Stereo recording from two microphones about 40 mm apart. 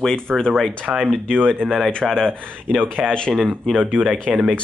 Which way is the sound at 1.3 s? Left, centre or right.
Right.